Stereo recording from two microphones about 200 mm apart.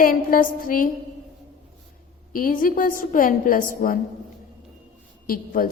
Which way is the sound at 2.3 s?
45° left (ahead or behind).